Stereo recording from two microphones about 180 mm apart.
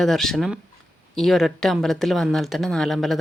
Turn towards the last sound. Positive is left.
turn(degrees=0)  # may be behind; listen again after turning